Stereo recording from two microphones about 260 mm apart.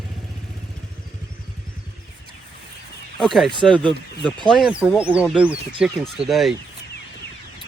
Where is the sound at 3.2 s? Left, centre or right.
Centre.